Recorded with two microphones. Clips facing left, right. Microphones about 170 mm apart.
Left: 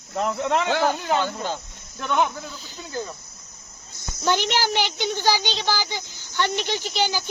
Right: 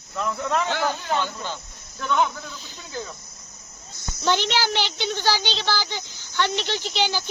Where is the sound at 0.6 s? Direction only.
50° left (ahead or behind).